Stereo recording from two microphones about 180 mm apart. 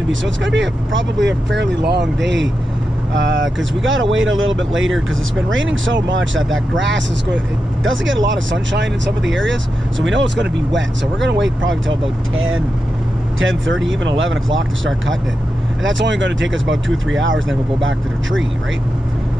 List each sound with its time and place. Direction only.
0.1 s speech: 90° right